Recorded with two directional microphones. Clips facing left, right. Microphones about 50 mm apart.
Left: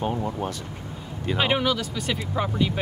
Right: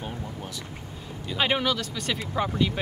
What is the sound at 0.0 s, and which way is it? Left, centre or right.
Speech, left.